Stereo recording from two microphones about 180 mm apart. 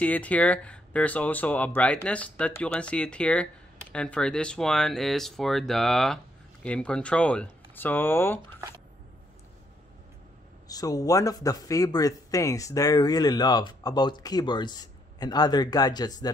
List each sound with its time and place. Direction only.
0.0 s speech: 10° left (ahead or behind)
10.7 s speech: 20° left (ahead or behind)